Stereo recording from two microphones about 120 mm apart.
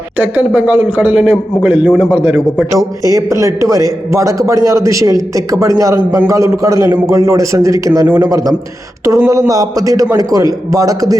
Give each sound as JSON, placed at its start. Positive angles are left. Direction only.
{"t": 0.2, "sound": "a man's voice", "side_deg": -15}
{"t": 2.7, "sound": "a man's voice", "side_deg": -30}